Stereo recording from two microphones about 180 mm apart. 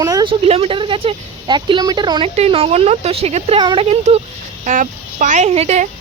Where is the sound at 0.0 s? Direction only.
20° right (ahead or behind).